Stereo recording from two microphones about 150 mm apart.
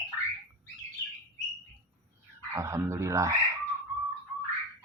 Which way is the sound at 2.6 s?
20° right (ahead or behind).